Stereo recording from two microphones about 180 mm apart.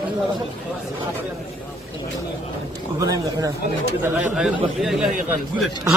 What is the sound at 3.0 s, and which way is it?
Speech, 20° right (ahead or behind).